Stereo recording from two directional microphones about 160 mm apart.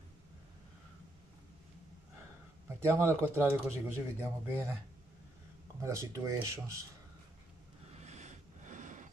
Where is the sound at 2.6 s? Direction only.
15° right (ahead or behind).